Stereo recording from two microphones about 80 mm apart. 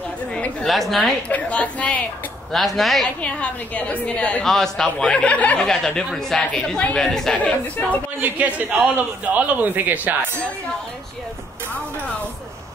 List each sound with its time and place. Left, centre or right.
0.3 s a woman's voice: centre
0.7 s a woman's voice: centre
1.3 s a woman's voice: centre
2.5 s a woman's voice: centre
3.2 s a woman's voice: centre
4.5 s a woman's voice: centre
8.2 s a man's voice: centre